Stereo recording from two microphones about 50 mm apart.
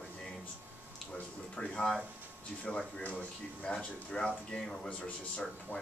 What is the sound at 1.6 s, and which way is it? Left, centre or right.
Speech, left.